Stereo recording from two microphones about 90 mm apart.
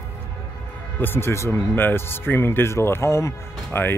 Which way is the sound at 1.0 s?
25° left (ahead or behind).